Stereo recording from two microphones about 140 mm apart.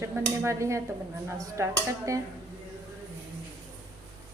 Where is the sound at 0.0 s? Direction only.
20° right (ahead or behind).